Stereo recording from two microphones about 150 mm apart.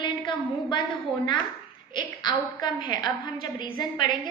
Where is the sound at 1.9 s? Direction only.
30° left (ahead or behind).